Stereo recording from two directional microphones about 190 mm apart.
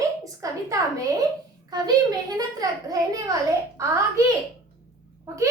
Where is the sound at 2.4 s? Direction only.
20° right (ahead or behind).